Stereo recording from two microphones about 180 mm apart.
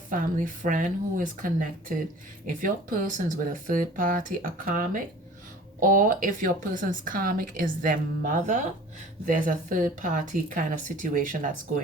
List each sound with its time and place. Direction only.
0.1 s speech: 50° right (ahead or behind)